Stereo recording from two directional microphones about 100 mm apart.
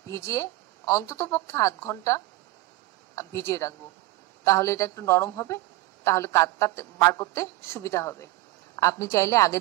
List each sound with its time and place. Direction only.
0.1 s a woman's voice: 30° left (ahead or behind)